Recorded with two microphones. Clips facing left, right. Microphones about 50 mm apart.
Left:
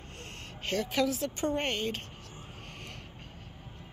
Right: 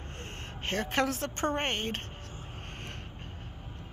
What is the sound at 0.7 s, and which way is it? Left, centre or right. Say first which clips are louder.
A woman's voice: even; right.